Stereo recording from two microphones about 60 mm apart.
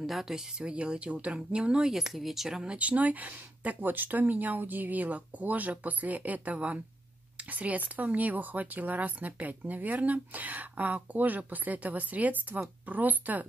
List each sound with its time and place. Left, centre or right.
0.0 s speech: centre; by 13.5 s right